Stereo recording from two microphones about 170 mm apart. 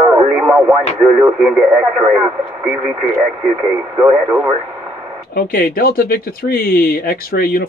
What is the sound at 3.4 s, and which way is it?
Speech, 30° right (ahead or behind).